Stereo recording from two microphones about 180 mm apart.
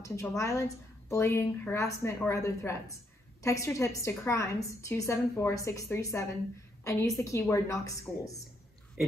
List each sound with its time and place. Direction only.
0.0 s a woman's voice: 15° left (ahead or behind)